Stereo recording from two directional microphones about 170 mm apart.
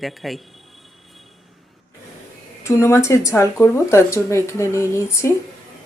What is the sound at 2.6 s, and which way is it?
Speech, 15° left (ahead or behind).